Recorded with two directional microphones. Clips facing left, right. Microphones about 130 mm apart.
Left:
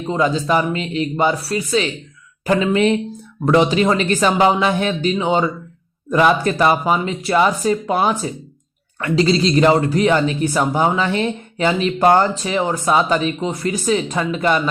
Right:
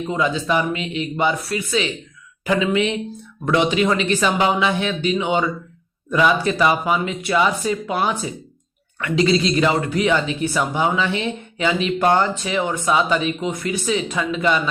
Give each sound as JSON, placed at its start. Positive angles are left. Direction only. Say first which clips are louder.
{"t": 0.1, "sound": "a man's voice", "louder": "left 4 dB", "side_deg": 40}